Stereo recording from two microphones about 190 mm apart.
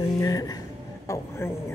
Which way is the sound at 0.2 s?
20° left (ahead or behind).